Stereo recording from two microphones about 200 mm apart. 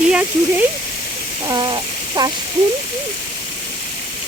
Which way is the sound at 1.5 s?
20° right (ahead or behind).